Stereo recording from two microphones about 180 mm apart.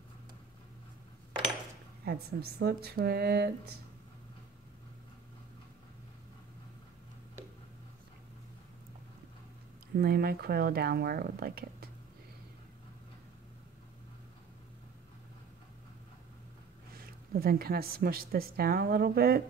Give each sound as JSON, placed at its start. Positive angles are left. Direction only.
{"t": 2.0, "sound": "speech", "side_deg": -60}
{"t": 9.9, "sound": "speech", "side_deg": -60}
{"t": 16.9, "sound": "speech", "side_deg": -55}